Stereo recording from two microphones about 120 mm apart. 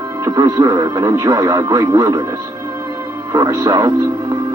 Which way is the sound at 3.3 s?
30° right (ahead or behind).